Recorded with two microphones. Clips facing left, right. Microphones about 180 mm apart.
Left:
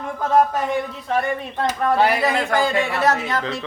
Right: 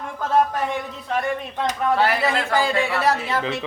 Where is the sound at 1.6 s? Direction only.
Centre (ahead or behind).